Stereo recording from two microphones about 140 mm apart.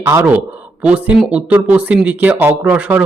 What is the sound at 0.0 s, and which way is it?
Speech, 15° right (ahead or behind).